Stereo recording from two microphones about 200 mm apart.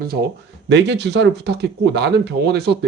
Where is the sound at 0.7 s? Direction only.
60° right (ahead or behind).